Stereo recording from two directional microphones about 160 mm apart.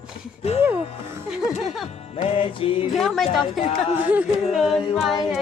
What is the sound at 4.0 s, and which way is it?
A capella, 10° right (ahead or behind).